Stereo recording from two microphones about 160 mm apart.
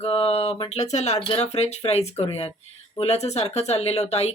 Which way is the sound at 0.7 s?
45° left (ahead or behind).